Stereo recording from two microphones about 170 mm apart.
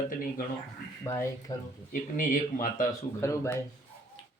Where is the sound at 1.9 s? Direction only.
50° left (ahead or behind).